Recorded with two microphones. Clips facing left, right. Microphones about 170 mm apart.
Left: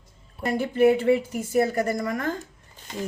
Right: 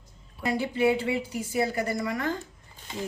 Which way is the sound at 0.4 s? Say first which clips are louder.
Left 5 dB; 50° left (ahead or behind).